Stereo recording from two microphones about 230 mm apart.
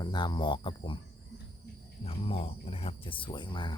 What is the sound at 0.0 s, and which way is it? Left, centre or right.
Speech, centre.